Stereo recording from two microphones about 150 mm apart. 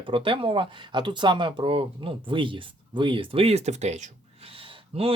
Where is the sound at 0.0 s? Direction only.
35° right (ahead or behind).